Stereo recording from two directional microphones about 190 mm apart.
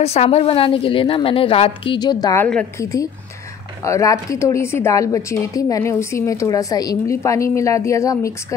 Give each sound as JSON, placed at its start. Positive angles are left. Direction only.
{"t": 0.0, "sound": "a woman's voice", "side_deg": 35}